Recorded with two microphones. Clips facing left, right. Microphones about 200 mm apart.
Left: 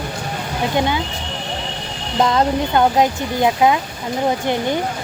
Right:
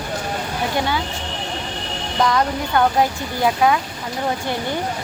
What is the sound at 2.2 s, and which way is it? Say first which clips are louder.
Speech: left 3 dB; 25° left (ahead or behind).